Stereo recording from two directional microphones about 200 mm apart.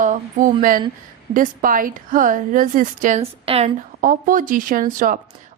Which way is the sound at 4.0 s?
45° right (ahead or behind).